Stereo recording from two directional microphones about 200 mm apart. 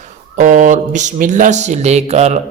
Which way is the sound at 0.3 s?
40° right (ahead or behind).